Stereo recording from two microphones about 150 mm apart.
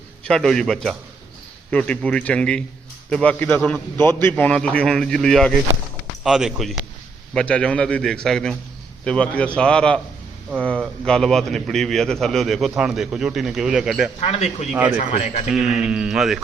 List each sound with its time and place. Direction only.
0.3 s a man's voice: 5° left (ahead or behind)
14.2 s a man's voice: 45° left (ahead or behind)
14.7 s a man's voice: 10° right (ahead or behind)
14.9 s a man's voice: 50° left (ahead or behind)
15.5 s a man's voice: centre (ahead or behind)